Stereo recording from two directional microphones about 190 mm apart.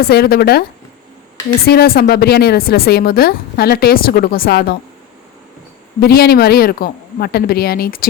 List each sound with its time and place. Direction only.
0.0 s speech: 55° left (ahead or behind)
1.6 s a woman's voice: 55° left (ahead or behind)
6.0 s a woman's voice: 55° left (ahead or behind)